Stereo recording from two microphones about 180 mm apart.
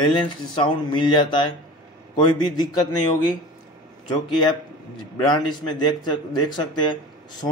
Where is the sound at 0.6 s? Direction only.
25° left (ahead or behind).